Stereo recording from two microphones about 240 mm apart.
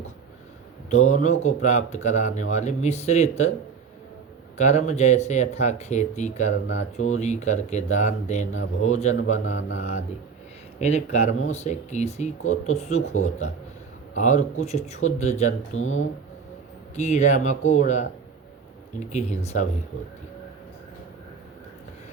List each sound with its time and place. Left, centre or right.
0.9 s speech: left
4.5 s speech: left
10.8 s speech: left